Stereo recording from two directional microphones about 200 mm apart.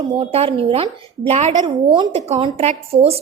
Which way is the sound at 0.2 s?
30° right (ahead or behind).